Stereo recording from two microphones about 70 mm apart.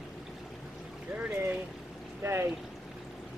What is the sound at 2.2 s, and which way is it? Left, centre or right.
Speech, right.